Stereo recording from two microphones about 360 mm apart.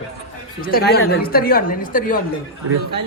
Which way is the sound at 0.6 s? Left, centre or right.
Left.